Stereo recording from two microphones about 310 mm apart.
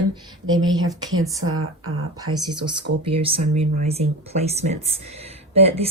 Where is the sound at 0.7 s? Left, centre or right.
Centre.